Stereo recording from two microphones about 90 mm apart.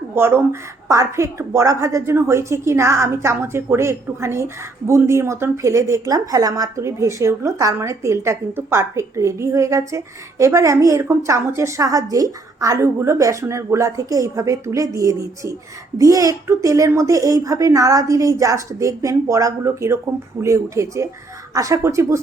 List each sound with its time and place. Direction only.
0.1 s a woman's voice: 25° right (ahead or behind)